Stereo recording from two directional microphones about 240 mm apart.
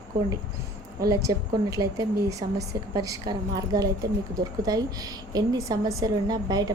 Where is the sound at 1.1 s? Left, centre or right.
Centre.